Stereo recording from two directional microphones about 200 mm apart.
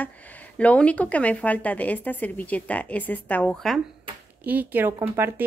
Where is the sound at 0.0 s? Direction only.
10° left (ahead or behind).